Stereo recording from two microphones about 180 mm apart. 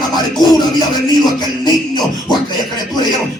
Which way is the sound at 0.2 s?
20° left (ahead or behind).